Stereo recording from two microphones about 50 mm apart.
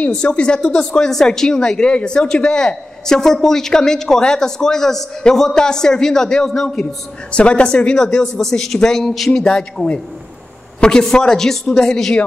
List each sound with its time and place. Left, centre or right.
0.1 s speech: centre
7.3 s a man's voice: left